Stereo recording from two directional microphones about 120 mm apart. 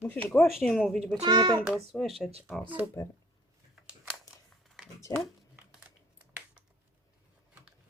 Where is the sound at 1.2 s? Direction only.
35° right (ahead or behind).